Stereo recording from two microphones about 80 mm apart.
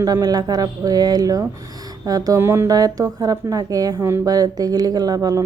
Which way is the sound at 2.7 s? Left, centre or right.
Right.